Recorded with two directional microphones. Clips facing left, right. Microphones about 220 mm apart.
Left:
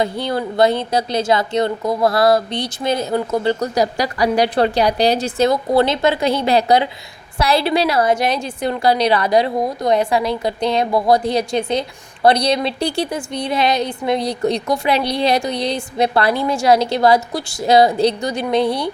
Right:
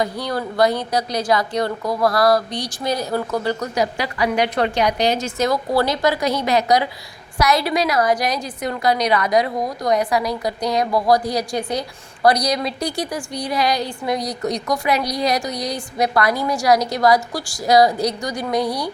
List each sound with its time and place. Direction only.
0.0 s a woman's voice: 25° left (ahead or behind)